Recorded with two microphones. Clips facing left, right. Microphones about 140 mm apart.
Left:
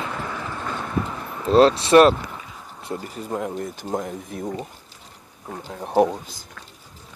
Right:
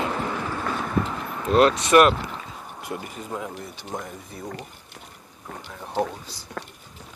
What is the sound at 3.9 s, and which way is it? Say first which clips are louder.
Speech: left 6 dB; 50° left (ahead or behind).